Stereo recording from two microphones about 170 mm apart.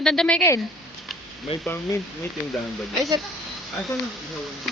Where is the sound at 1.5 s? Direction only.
35° left (ahead or behind).